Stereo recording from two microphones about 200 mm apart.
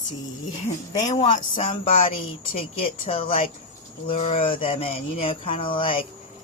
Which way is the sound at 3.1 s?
30° left (ahead or behind).